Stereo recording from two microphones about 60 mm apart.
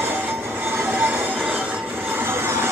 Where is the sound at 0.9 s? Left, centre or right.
Right.